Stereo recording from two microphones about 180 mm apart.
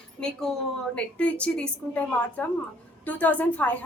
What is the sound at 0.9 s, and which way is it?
A woman's voice, 5° left (ahead or behind).